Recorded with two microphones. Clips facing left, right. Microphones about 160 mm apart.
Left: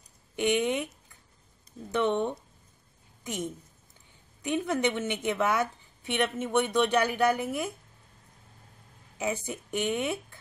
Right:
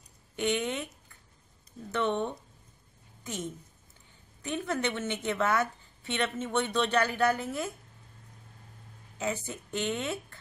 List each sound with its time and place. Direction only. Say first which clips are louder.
0.4 s a woman's voice: left 4 dB; 15° left (ahead or behind)
1.9 s a woman's voice: left 3 dB; 15° left (ahead or behind)
4.4 s a woman's voice: left 4 dB; 15° left (ahead or behind)
9.2 s a woman's voice: left 2 dB; 15° left (ahead or behind)